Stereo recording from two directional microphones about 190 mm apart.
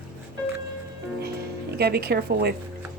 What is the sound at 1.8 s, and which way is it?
Speech, 55° right (ahead or behind).